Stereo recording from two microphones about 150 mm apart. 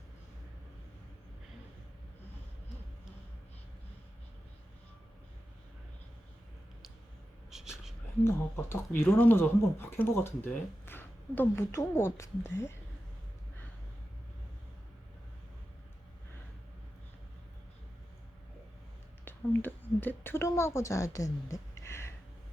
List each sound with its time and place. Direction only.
7.5 s a sound: 5° right (ahead or behind)
8.2 s speech: 15° left (ahead or behind)
19.2 s speech: 15° left (ahead or behind)